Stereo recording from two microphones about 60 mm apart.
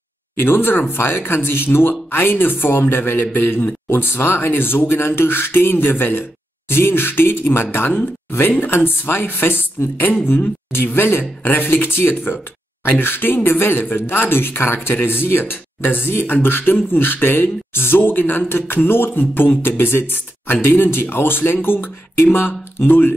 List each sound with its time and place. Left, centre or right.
0.4 s speech: left